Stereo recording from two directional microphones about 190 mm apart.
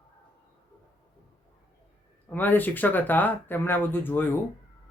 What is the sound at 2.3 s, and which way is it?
Speech, 10° left (ahead or behind).